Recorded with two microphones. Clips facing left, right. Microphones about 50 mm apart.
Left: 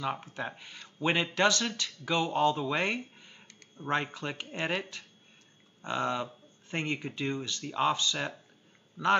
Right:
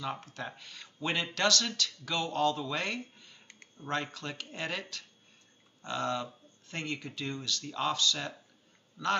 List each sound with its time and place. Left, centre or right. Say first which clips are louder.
0.0 s a man's voice: left 3 dB; centre